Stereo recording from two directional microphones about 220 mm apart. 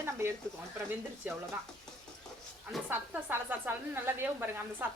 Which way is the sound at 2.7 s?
10° right (ahead or behind).